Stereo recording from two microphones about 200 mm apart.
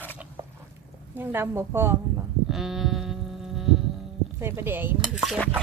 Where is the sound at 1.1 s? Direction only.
10° right (ahead or behind).